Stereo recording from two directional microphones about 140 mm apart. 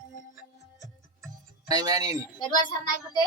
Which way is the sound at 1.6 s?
30° right (ahead or behind).